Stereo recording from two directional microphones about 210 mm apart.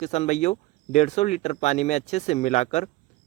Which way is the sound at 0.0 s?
30° left (ahead or behind).